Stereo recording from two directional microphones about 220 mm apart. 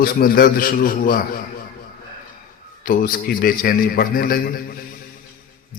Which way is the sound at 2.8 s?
40° left (ahead or behind).